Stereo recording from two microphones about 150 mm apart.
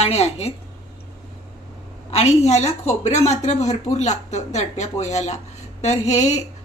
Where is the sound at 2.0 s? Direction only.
45° left (ahead or behind).